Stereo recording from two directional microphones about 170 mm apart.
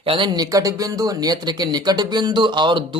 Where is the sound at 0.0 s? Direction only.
30° right (ahead or behind).